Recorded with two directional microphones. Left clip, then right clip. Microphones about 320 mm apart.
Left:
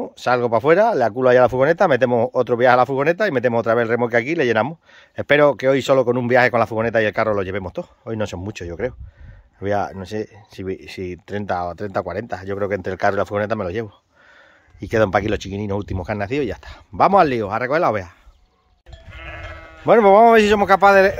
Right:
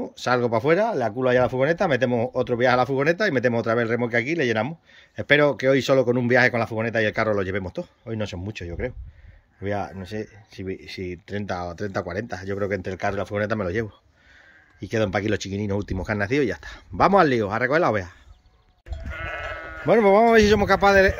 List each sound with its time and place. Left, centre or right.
0.0 s speech: centre
18.9 s sheep: right
19.8 s speech: centre